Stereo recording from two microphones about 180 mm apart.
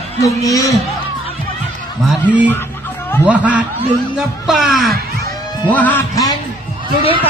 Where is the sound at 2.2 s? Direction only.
10° right (ahead or behind); by 6.0 s 10° left (ahead or behind).